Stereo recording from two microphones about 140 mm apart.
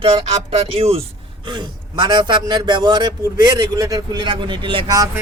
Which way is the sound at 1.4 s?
30° right (ahead or behind).